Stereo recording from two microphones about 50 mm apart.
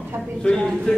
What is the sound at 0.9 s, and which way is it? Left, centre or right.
Speech, left.